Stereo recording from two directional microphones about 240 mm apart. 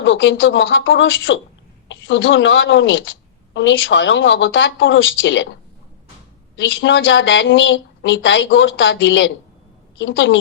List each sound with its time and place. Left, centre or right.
0.0 s a woman's voice: left
6.6 s a woman's voice: left